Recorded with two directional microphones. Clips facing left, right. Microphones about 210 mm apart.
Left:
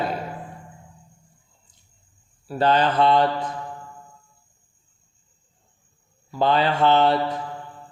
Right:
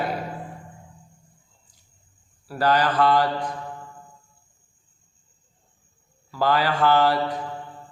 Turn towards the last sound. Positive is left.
turn(degrees=25)  # may be behind; listen again after turning